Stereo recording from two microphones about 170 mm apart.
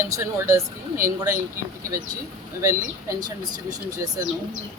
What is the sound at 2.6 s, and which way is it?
Speech, 15° right (ahead or behind).